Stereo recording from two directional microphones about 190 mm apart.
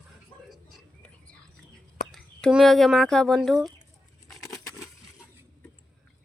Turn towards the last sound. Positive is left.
turn(degrees=20)  # may be behind; listen again after turning